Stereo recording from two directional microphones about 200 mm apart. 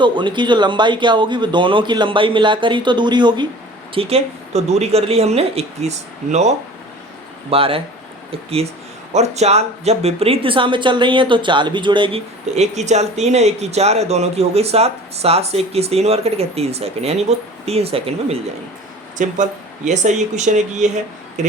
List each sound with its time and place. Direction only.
0.0 s speech: 25° right (ahead or behind)
7.5 s speech: 30° right (ahead or behind)